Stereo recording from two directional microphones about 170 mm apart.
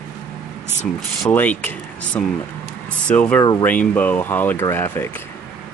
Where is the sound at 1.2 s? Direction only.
10° left (ahead or behind).